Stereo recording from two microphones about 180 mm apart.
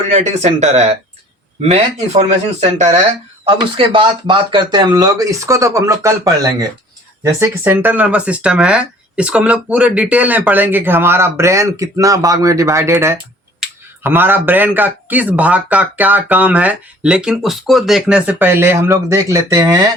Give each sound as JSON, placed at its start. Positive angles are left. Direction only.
{"t": 0.1, "sound": "speech", "side_deg": -40}
{"t": 3.4, "sound": "speech", "side_deg": -30}